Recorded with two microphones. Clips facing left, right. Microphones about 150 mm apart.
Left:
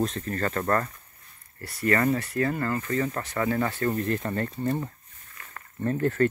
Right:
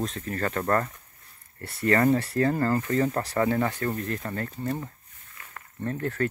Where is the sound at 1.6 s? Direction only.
25° right (ahead or behind).